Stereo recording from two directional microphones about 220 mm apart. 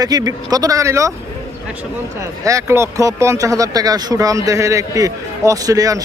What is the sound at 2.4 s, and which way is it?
Speech, 15° right (ahead or behind).